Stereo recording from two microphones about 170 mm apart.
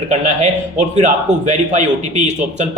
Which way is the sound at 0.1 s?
45° right (ahead or behind).